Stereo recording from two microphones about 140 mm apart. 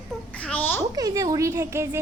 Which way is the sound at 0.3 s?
10° left (ahead or behind).